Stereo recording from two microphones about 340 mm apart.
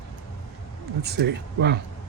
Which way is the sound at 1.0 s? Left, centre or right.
Right.